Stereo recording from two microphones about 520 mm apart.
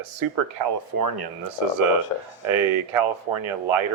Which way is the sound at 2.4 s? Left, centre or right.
Right.